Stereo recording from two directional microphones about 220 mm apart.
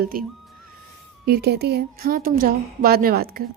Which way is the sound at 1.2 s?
45° right (ahead or behind).